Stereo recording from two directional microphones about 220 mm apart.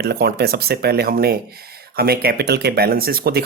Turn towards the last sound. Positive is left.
turn(degrees=-45)  # may be behind; listen again after turning